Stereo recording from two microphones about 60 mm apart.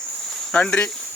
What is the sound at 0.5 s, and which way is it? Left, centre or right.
Speech, centre.